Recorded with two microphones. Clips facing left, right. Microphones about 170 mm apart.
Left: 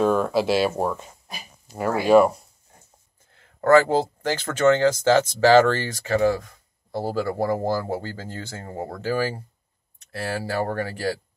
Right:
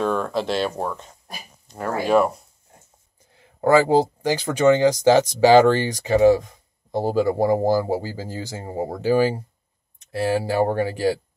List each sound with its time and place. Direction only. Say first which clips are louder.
0.0 s speech: left 3 dB; 5° left (ahead or behind)
3.3 s speech: even; 15° right (ahead or behind)